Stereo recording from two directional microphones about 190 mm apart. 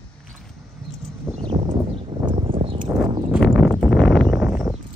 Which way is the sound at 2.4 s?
30° right (ahead or behind).